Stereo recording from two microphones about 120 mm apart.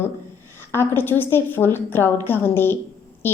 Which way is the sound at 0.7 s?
20° left (ahead or behind).